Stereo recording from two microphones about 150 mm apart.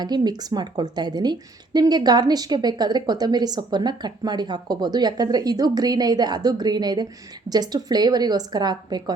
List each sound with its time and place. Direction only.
0.0 s a woman's voice: 30° right (ahead or behind)